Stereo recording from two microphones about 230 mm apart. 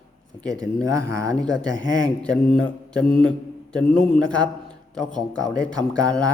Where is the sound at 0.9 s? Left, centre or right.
Centre.